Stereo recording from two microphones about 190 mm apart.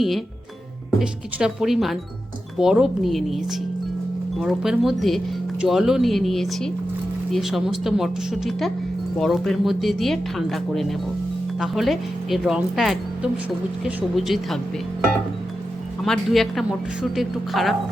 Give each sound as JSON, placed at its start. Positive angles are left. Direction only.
{"t": 0.9, "sound": "speech", "side_deg": -5}
{"t": 16.0, "sound": "speech", "side_deg": 0}